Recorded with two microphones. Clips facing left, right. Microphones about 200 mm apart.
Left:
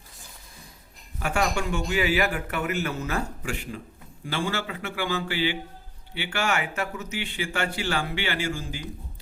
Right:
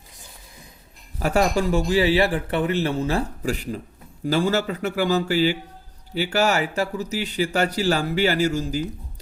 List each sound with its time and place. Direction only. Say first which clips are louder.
1.2 s speech: right 6 dB; 35° right (ahead or behind)